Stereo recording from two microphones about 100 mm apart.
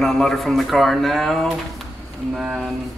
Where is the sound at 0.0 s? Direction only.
5° left (ahead or behind).